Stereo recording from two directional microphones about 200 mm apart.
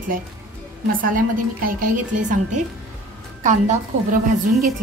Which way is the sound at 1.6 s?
40° right (ahead or behind).